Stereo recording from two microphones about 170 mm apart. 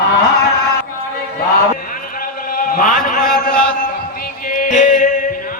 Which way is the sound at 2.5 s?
55° left (ahead or behind).